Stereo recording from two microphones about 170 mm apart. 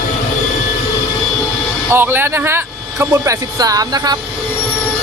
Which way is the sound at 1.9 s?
15° right (ahead or behind).